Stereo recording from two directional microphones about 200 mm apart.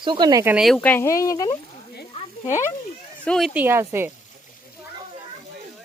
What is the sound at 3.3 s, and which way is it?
Speech, centre (ahead or behind).